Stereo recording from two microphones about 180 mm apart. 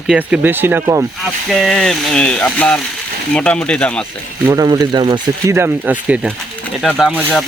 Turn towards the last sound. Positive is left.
turn(degrees=5)  # may be behind; listen again after turning